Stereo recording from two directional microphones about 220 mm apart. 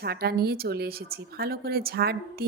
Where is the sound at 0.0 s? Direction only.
45° right (ahead or behind).